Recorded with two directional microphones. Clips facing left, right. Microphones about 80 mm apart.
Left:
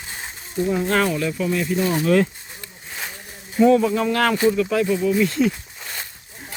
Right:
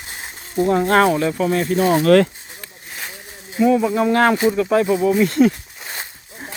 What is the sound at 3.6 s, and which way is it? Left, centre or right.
Speech, centre.